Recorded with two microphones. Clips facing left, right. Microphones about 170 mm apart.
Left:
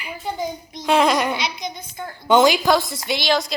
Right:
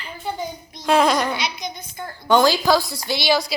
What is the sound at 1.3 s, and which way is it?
A child's voice, 25° left (ahead or behind).